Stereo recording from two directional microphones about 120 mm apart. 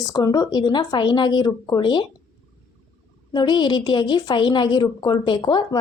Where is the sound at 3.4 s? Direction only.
40° left (ahead or behind).